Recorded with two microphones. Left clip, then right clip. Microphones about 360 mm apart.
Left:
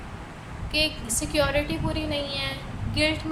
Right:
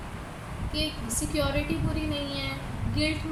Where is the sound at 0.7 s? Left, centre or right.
Left.